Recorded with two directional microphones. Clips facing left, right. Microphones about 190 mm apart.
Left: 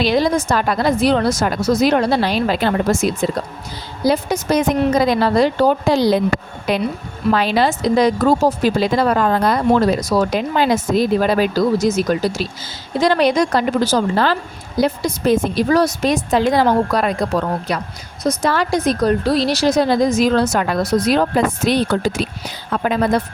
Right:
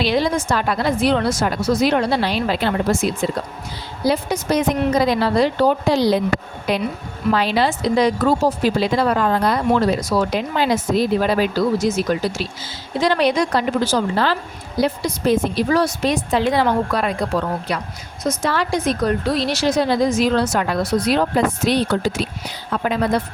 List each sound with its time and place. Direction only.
0.0 s a woman's voice: 40° left (ahead or behind)